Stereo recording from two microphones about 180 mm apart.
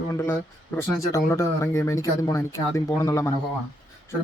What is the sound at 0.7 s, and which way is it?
Speech, 5° left (ahead or behind).